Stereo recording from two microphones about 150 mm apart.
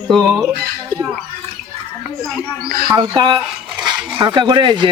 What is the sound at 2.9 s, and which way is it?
Speech, 30° right (ahead or behind).